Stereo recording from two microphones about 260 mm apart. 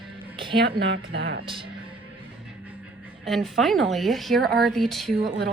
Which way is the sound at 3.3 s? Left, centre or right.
Centre.